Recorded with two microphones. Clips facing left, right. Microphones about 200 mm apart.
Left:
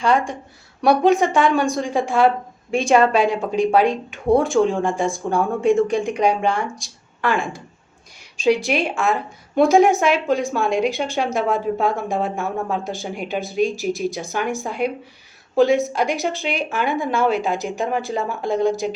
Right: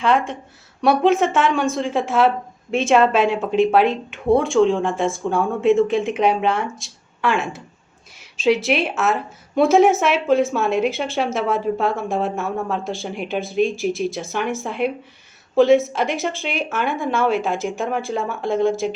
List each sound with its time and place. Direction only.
0.0 s speech: centre (ahead or behind)